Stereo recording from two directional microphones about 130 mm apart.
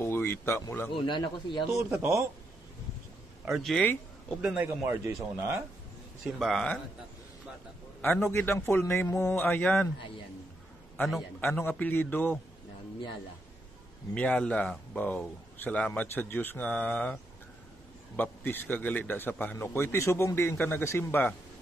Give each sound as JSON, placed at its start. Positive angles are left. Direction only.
{"t": 0.0, "sound": "speech", "side_deg": 20}
{"t": 0.9, "sound": "speech", "side_deg": 35}
{"t": 1.8, "sound": "a man's voice", "side_deg": -20}
{"t": 3.7, "sound": "a man's voice", "side_deg": 15}
{"t": 4.4, "sound": "speech", "side_deg": -10}
{"t": 6.2, "sound": "a man's voice", "side_deg": 0}
{"t": 8.0, "sound": "a man's voice", "side_deg": 20}
{"t": 11.1, "sound": "a man's voice", "side_deg": 0}
{"t": 11.5, "sound": "a man's voice", "side_deg": 15}
{"t": 14.1, "sound": "a man's voice", "side_deg": 10}